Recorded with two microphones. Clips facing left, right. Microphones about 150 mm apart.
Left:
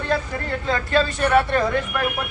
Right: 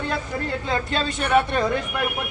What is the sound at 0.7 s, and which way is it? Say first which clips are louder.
Speech: left 6 dB; 20° right (ahead or behind).